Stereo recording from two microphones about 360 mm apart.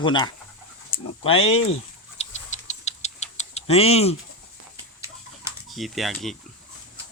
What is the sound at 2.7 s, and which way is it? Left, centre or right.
Rodents, centre.